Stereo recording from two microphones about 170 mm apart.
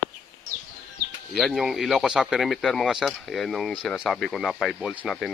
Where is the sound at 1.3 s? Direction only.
Centre (ahead or behind).